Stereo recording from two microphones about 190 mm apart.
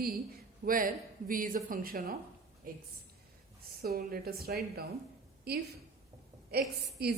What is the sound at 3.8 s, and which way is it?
A woman's voice, 55° right (ahead or behind).